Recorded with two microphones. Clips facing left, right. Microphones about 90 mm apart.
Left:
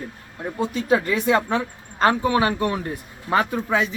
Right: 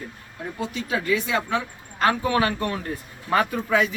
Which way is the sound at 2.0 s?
30° left (ahead or behind).